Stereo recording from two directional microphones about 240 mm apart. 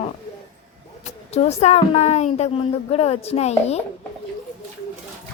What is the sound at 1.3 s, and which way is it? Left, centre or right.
A woman's voice, left.